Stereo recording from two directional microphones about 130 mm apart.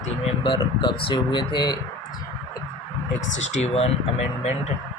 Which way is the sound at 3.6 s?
50° left (ahead or behind).